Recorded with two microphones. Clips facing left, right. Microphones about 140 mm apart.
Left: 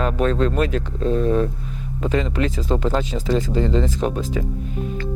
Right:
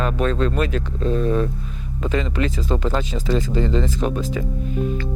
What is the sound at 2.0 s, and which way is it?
Speech, 35° left (ahead or behind).